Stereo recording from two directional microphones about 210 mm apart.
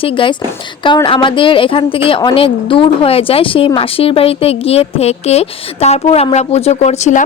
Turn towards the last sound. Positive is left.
turn(degrees=35)  # may be behind; listen again after turning